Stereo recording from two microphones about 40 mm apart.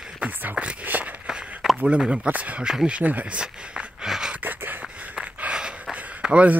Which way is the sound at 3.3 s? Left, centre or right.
Centre.